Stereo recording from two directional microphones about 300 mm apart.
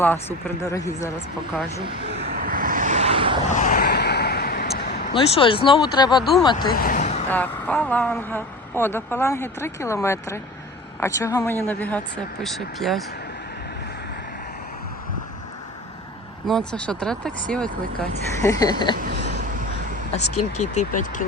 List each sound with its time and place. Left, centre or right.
0.0 s speech: centre
2.3 s vehicle: right
3.5 s a sound: left
5.1 s speech: centre
6.7 s a sound: left
7.3 s speech: centre
16.5 s speech: centre
18.4 s speech: centre
20.1 s speech: left